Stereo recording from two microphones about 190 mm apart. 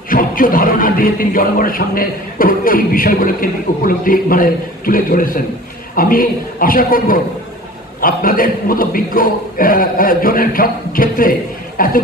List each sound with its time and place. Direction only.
0.1 s music: 45° left (ahead or behind)